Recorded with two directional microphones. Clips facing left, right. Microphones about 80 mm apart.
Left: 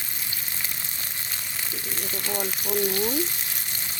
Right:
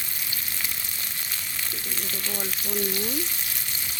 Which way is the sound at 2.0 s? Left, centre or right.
Left.